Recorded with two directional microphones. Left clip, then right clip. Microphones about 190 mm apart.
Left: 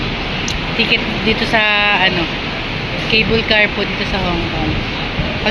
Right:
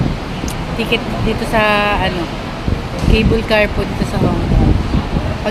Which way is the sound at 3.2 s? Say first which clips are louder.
Left 1 dB; 20° right (ahead or behind).